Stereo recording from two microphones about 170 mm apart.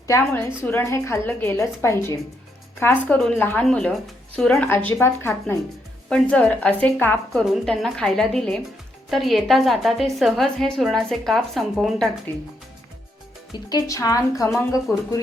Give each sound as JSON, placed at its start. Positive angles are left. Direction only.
{"t": 0.1, "sound": "a woman's voice", "side_deg": 15}
{"t": 13.7, "sound": "speech", "side_deg": 20}